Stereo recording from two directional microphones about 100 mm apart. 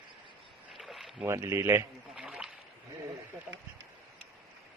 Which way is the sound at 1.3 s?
30° right (ahead or behind).